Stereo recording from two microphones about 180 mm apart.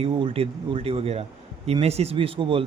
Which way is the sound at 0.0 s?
30° right (ahead or behind).